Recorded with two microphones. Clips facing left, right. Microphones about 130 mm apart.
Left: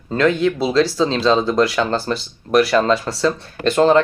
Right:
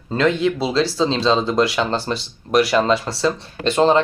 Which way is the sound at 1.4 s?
Centre (ahead or behind).